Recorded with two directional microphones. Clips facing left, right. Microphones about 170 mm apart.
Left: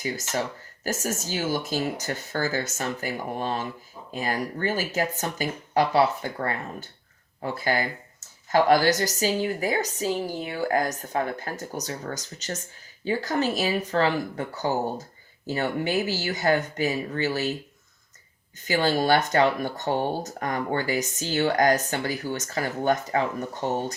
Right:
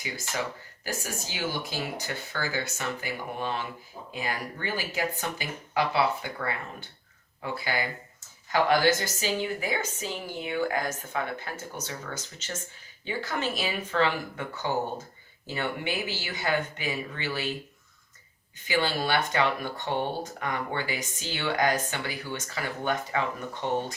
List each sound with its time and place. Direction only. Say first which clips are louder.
0.0 s speech: left 5 dB; 45° left (ahead or behind)
18.7 s speech: left 5 dB; 45° left (ahead or behind)